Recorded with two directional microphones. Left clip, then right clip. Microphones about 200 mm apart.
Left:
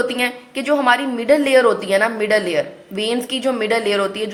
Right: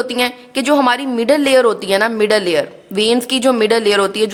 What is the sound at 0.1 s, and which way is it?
A woman's voice, 40° right (ahead or behind).